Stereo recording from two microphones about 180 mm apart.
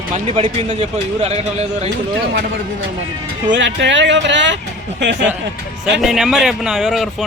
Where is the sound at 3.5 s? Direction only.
90° right; by 5.3 s 75° right (ahead or behind).